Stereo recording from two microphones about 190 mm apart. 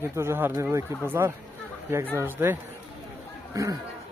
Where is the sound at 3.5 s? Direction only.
15° right (ahead or behind).